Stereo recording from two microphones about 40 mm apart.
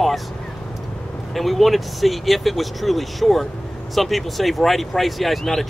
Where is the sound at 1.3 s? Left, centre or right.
Centre.